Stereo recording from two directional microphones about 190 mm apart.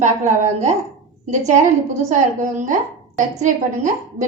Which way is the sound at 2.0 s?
40° right (ahead or behind).